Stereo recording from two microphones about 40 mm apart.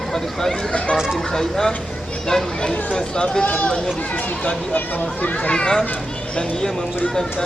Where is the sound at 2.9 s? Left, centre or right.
Left.